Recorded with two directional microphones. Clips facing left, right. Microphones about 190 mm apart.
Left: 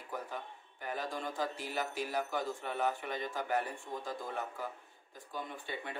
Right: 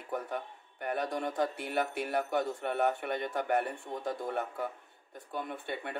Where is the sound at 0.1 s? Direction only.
65° right (ahead or behind).